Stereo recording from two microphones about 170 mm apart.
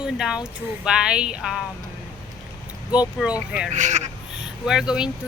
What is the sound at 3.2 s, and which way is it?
Speech, 5° right (ahead or behind).